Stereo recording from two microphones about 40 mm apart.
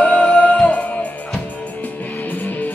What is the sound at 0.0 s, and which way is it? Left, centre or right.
Music, left.